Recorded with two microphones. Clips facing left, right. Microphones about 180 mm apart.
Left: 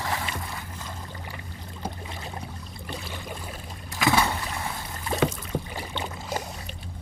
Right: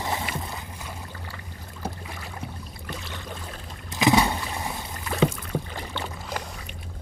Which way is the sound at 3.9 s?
20° right (ahead or behind).